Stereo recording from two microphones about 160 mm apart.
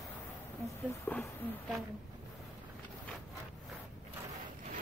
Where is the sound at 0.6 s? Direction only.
15° left (ahead or behind).